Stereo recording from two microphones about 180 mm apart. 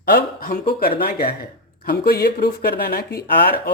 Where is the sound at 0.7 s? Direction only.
55° left (ahead or behind).